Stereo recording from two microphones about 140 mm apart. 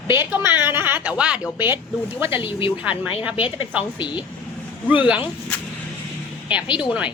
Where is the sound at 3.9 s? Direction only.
35° left (ahead or behind).